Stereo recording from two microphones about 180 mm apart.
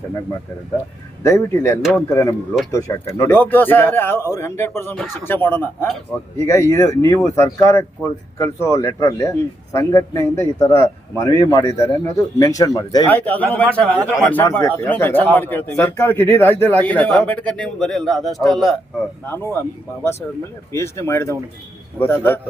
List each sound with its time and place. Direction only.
1.2 s speech: 15° left (ahead or behind)
13.1 s speech: 10° left (ahead or behind)
19.2 s speech: 10° left (ahead or behind)
20.7 s speech: 15° left (ahead or behind)